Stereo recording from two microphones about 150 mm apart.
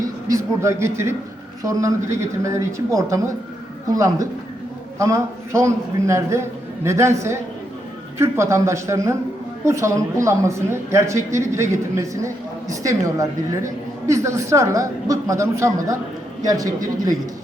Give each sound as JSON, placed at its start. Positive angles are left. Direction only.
{"t": 0.3, "sound": "a woman's voice", "side_deg": -20}